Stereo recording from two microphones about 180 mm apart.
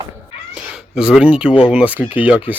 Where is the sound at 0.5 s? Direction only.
5° right (ahead or behind).